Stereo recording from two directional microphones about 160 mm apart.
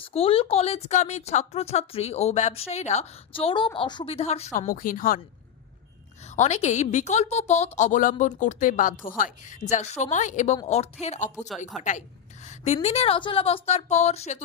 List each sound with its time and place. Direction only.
0.0 s a woman's voice: 35° left (ahead or behind)
4.7 s speech: 60° left (ahead or behind)
6.2 s a woman's voice: 45° left (ahead or behind)